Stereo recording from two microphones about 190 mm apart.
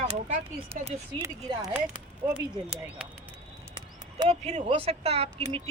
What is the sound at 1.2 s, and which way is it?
Speech, 15° right (ahead or behind).